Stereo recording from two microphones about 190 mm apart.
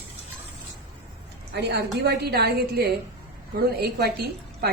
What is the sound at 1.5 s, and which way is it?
A woman's voice, 60° right (ahead or behind).